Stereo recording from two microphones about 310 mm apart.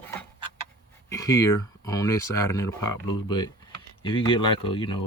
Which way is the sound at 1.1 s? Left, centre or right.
Centre.